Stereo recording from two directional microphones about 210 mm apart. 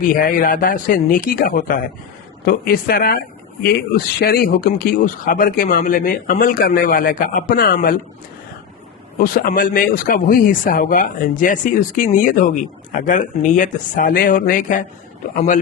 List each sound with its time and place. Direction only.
0.0 s speech: 40° left (ahead or behind)
9.1 s speech: 45° left (ahead or behind)